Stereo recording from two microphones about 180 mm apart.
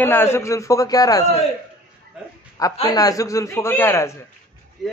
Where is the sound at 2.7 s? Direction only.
25° left (ahead or behind).